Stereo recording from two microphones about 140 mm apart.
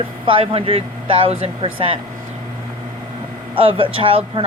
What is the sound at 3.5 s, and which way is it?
Speech, 40° right (ahead or behind).